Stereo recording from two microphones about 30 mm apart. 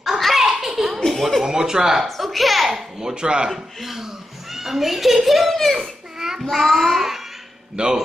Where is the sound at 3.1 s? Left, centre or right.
Right.